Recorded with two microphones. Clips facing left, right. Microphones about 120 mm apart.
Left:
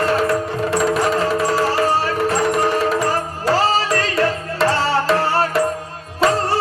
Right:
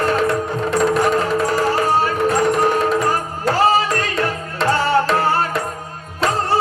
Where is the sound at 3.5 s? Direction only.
30° left (ahead or behind).